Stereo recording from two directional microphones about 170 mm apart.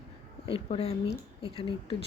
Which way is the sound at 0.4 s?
35° left (ahead or behind).